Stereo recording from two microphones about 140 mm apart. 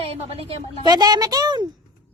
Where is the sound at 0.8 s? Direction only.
30° right (ahead or behind).